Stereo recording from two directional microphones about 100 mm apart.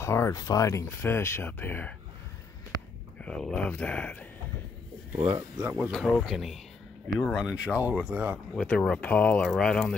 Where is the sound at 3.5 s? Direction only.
15° left (ahead or behind).